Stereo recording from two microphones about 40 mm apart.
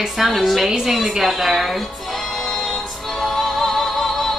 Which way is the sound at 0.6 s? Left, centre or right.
Centre.